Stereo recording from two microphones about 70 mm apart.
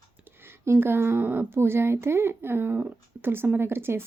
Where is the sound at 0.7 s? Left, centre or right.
Right.